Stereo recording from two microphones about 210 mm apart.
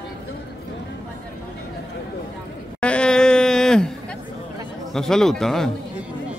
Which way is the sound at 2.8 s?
5° left (ahead or behind).